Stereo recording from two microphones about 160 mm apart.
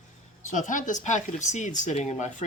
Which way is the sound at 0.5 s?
55° left (ahead or behind).